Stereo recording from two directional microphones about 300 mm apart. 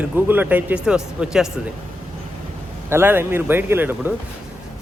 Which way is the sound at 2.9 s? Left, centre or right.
Centre.